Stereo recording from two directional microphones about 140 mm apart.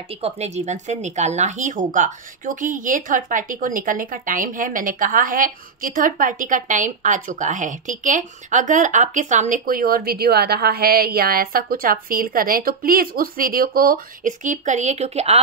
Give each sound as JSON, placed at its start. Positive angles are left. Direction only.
{"t": 0.1, "sound": "speech", "side_deg": -50}